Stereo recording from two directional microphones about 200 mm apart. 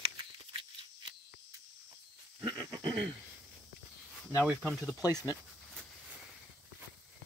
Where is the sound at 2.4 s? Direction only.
20° right (ahead or behind).